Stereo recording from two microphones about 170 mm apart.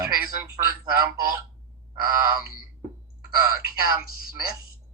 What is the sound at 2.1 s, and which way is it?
Speech, 15° right (ahead or behind).